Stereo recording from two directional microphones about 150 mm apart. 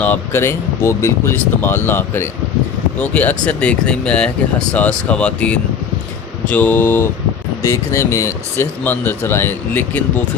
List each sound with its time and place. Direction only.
0.0 s speech: 15° left (ahead or behind)